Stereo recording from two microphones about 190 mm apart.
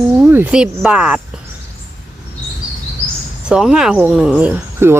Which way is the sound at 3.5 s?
5° right (ahead or behind).